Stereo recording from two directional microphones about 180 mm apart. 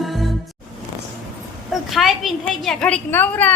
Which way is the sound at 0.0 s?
Centre (ahead or behind).